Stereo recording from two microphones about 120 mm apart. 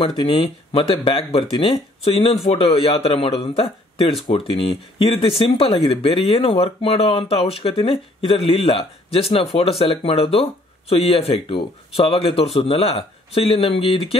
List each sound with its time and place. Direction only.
0.0 s speech: 45° left (ahead or behind)